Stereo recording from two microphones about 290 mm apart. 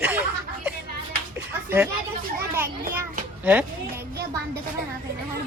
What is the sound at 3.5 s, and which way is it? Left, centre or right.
Speech, centre.